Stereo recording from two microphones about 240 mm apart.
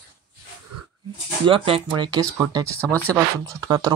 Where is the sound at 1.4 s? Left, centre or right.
Right.